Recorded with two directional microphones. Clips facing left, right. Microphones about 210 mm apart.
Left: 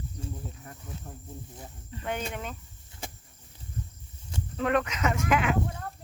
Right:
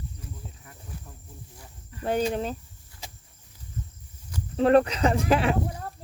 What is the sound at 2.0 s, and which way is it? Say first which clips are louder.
Speech: right 8 dB; 35° right (ahead or behind).